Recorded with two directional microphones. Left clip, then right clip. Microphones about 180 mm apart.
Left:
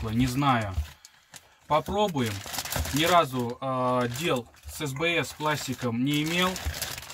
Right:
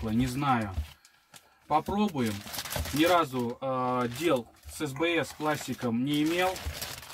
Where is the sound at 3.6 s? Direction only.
15° right (ahead or behind).